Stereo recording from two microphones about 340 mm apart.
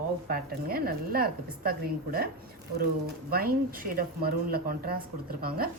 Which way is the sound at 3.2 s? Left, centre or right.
Right.